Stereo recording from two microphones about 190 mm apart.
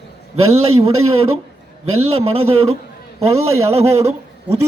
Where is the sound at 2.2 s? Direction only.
30° right (ahead or behind).